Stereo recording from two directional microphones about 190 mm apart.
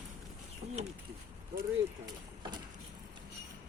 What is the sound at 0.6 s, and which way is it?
Speech, 35° right (ahead or behind).